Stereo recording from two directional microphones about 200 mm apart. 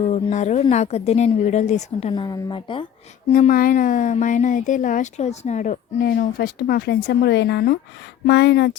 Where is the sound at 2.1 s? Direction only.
25° left (ahead or behind).